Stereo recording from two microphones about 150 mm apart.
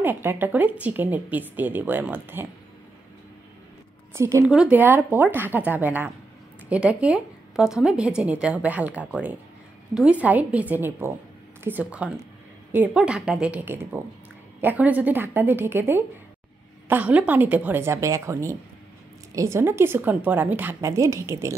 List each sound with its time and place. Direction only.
0.0 s a woman's voice: 15° right (ahead or behind)
4.1 s speech: 20° right (ahead or behind)
4.5 s a woman's voice: 10° right (ahead or behind)